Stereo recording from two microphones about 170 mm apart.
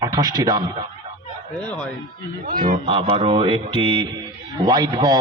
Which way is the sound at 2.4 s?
55° right (ahead or behind).